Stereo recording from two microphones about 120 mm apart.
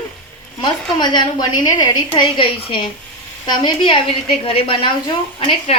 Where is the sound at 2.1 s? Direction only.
50° left (ahead or behind).